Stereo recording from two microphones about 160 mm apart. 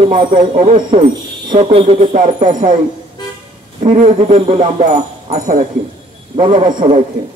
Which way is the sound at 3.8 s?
50° right (ahead or behind).